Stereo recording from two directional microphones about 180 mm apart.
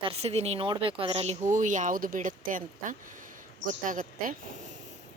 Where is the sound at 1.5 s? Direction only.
45° right (ahead or behind).